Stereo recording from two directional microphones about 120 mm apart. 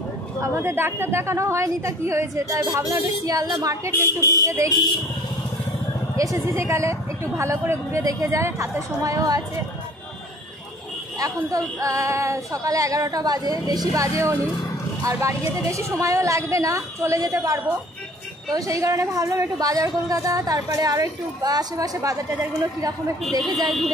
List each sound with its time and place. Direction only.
0.4 s a woman's voice: 20° right (ahead or behind)
3.9 s speech: 20° left (ahead or behind)
4.5 s a woman's voice: 25° right (ahead or behind)
6.1 s a woman's voice: 25° right (ahead or behind)
11.1 s a woman's voice: 30° right (ahead or behind)